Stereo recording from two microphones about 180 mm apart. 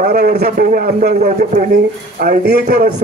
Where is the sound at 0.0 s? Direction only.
50° right (ahead or behind).